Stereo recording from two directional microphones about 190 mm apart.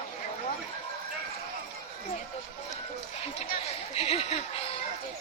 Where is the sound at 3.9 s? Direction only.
35° left (ahead or behind).